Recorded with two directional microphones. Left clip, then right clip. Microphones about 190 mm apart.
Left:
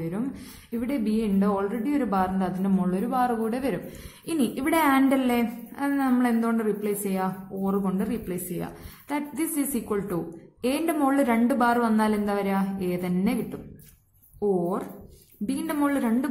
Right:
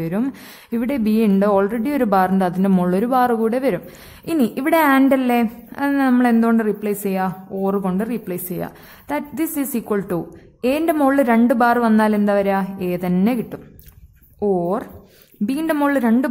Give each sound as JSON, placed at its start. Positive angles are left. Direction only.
{"t": 0.0, "sound": "a woman's voice", "side_deg": -40}
{"t": 15.4, "sound": "a woman's voice", "side_deg": -35}